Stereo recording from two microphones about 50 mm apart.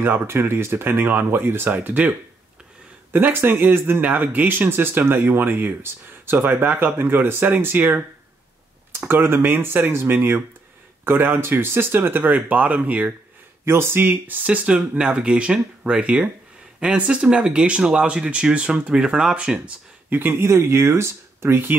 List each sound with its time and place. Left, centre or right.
0.0 s speech: right
3.1 s speech: right
9.0 s speech: right
13.7 s speech: right
14.4 s speech: right
15.0 s speech: centre
20.1 s speech: right
20.4 s speech: right